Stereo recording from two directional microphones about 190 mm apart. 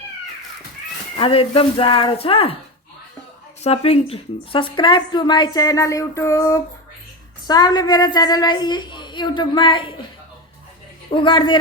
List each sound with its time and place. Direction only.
1.1 s a woman's voice: 30° left (ahead or behind)
3.6 s a woman's voice: 35° left (ahead or behind)
11.1 s a woman's voice: 25° left (ahead or behind)